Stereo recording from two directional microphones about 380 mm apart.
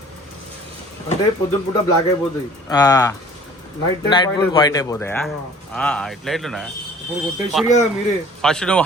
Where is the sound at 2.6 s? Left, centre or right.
Centre.